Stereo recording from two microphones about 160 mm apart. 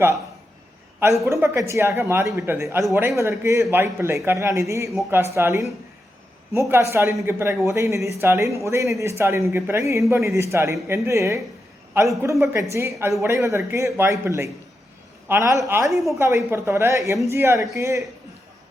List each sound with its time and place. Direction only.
1.2 s a woman's voice: 20° right (ahead or behind)
15.9 s a woman's voice: centre (ahead or behind)
16.1 s a woman's voice: 15° right (ahead or behind)